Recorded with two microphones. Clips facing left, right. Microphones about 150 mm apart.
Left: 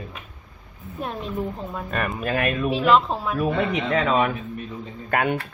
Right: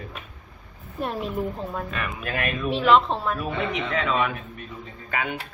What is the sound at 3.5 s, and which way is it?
Speech, 40° left (ahead or behind).